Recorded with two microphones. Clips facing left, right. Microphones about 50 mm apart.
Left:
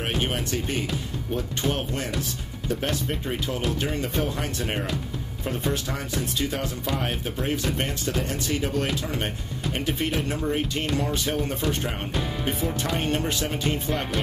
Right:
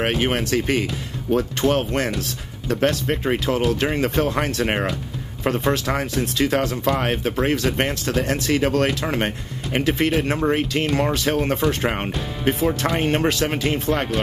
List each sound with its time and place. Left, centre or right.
0.0 s speech: right
3.8 s speech: right
7.0 s speech: right
11.8 s speech: right